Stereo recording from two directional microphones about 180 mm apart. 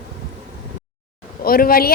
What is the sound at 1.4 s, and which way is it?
Speech, 55° left (ahead or behind).